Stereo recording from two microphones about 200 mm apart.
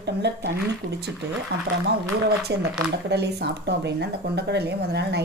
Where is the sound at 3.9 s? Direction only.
60° right (ahead or behind).